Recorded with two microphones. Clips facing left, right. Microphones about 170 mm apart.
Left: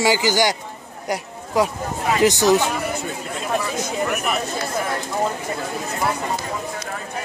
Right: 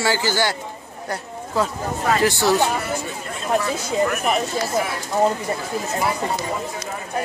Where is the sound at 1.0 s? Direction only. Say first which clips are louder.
Left 3 dB; 15° left (ahead or behind).